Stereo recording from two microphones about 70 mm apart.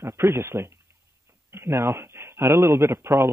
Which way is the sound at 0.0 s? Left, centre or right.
Right.